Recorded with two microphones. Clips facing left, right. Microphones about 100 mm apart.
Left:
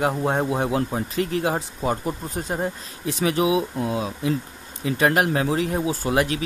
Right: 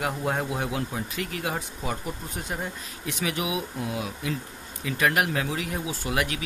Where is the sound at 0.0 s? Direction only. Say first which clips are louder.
Left 6 dB; 30° left (ahead or behind).